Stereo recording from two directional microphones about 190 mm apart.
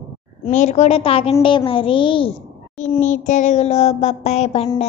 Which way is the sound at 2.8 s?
40° left (ahead or behind).